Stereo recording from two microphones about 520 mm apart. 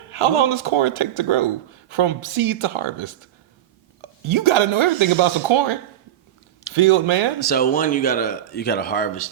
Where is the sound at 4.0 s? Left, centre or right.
Right.